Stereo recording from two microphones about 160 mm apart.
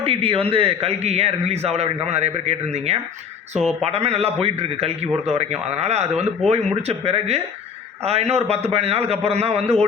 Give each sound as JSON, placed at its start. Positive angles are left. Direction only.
{"t": 0.0, "sound": "a man's voice", "side_deg": -35}